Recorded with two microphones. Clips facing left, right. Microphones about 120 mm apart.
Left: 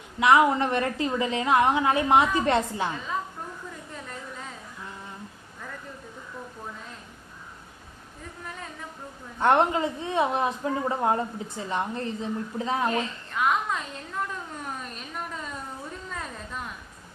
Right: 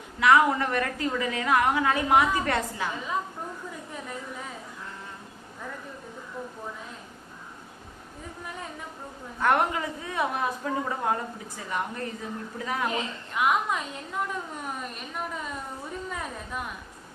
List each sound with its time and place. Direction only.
0.2 s a woman's voice: 20° left (ahead or behind)
9.4 s a woman's voice: 25° left (ahead or behind)
12.9 s a woman's voice: 15° right (ahead or behind)
16.0 s a sound: 10° right (ahead or behind)